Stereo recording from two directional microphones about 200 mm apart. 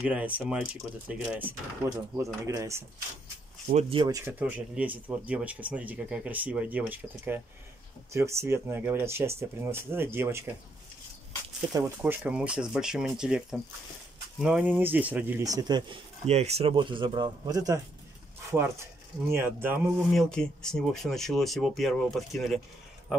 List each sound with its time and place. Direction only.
0.0 s speech: 5° right (ahead or behind)
3.6 s speech: 30° right (ahead or behind)
4.2 s speech: 10° right (ahead or behind)
12.0 s speech: 5° right (ahead or behind)
16.3 s speech: 30° right (ahead or behind); by 19.8 s 10° right (ahead or behind)
20.2 s speech: 5° left (ahead or behind)